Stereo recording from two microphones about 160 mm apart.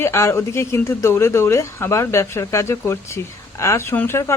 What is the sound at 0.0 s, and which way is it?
A man's voice, 15° left (ahead or behind).